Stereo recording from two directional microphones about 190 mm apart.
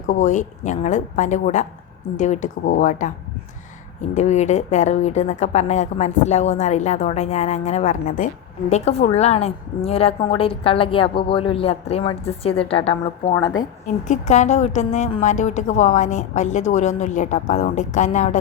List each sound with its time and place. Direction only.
0.1 s a woman's voice: 40° left (ahead or behind)
4.1 s a woman's voice: 35° left (ahead or behind)
13.8 s a woman's voice: 40° left (ahead or behind)